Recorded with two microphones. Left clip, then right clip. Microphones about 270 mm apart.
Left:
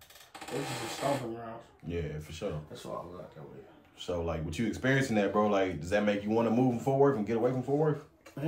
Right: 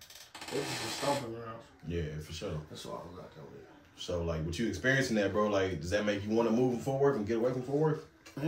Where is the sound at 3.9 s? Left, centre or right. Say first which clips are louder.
Left 1 dB; centre.